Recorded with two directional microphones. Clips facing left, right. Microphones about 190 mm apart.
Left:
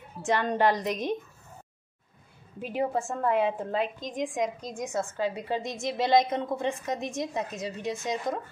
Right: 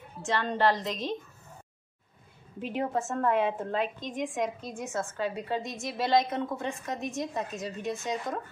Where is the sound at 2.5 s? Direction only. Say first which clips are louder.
Left 2 dB; 10° left (ahead or behind).